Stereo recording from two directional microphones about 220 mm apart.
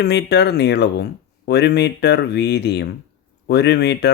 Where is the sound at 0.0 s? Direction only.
50° left (ahead or behind).